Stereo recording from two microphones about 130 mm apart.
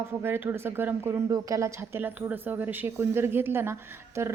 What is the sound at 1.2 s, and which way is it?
A woman's voice, 25° right (ahead or behind).